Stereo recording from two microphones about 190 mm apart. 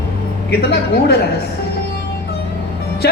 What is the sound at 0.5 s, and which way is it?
Speech, 55° left (ahead or behind).